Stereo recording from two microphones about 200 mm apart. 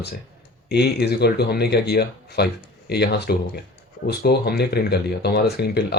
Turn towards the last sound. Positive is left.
turn(degrees=55)  # may be behind; listen again after turning